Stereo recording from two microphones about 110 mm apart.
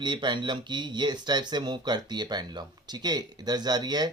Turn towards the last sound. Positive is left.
turn(degrees=-40)  # may be behind; listen again after turning